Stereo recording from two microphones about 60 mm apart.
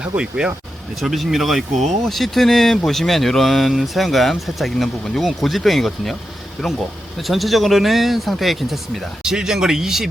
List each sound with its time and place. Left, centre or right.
0.0 s speech: centre
0.9 s speech: centre